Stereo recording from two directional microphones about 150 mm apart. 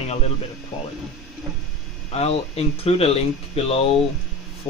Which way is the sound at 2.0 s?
40° left (ahead or behind).